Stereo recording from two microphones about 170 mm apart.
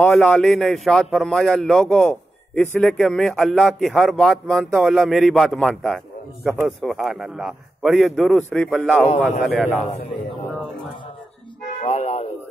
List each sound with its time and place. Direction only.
0.1 s a man's voice: 5° left (ahead or behind)
11.8 s speech: 40° left (ahead or behind)